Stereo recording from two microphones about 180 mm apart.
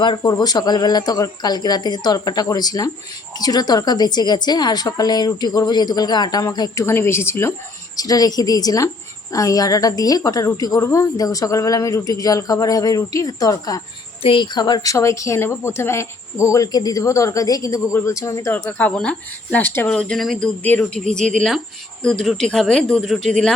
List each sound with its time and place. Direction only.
0.0 s a woman's voice: 25° left (ahead or behind)
22.0 s speech: centre (ahead or behind)